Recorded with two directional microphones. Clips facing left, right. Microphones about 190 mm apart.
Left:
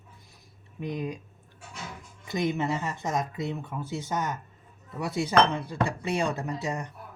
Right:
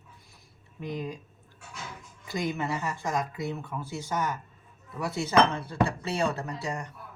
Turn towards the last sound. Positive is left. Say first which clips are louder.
# left 3 dB
turn(degrees=20)  # may be behind; listen again after turning